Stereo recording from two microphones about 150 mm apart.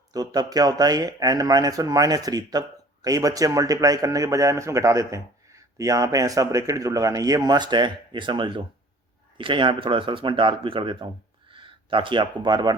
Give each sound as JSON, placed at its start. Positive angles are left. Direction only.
{"t": 0.1, "sound": "speech", "side_deg": -25}